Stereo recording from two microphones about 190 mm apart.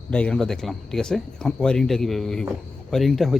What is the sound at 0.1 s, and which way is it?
Speech, 5° left (ahead or behind).